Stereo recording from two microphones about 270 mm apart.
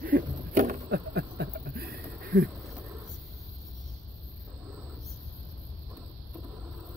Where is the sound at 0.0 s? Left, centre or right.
Right.